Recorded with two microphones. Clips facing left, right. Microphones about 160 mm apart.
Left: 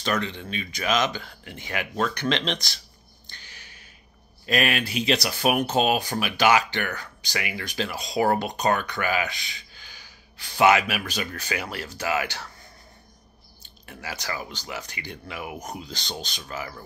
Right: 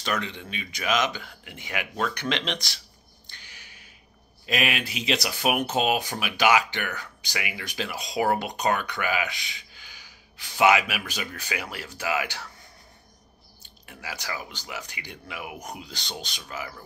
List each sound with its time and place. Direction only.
0.0 s speech: 10° right (ahead or behind)
3.3 s a sound: 10° right (ahead or behind)
4.5 s speech: 15° right (ahead or behind)
9.3 s speech: 40° left (ahead or behind)
9.8 s speech: 10° right (ahead or behind)
13.6 s speech: 10° right (ahead or behind)